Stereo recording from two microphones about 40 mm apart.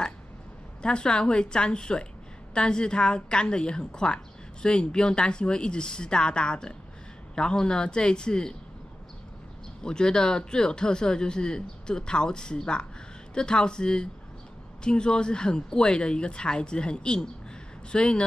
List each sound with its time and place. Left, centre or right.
0.8 s a woman's voice: left
9.8 s a woman's voice: centre